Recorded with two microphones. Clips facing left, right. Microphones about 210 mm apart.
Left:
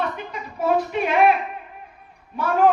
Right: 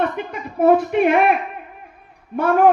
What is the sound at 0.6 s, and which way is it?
Speech, 55° right (ahead or behind).